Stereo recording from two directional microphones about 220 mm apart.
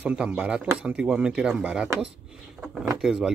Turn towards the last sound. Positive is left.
turn(degrees=0)  # may be behind; listen again after turning